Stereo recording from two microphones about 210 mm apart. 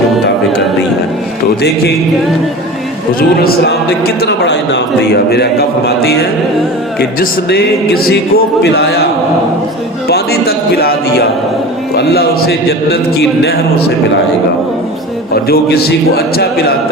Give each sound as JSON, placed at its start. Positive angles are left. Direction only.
{"t": 3.2, "sound": "a man's voice", "side_deg": 50}
{"t": 10.1, "sound": "a man's voice", "side_deg": 50}
{"t": 15.4, "sound": "a man's voice", "side_deg": 50}